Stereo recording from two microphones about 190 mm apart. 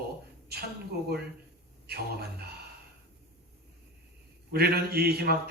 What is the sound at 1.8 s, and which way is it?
Speech, 55° right (ahead or behind).